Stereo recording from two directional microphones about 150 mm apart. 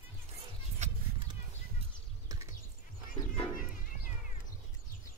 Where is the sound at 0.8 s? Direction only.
50° right (ahead or behind).